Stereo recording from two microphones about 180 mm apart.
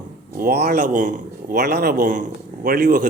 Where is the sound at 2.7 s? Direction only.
55° right (ahead or behind).